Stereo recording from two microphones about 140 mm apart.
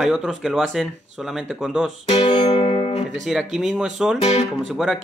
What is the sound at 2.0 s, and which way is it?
Music, 45° left (ahead or behind).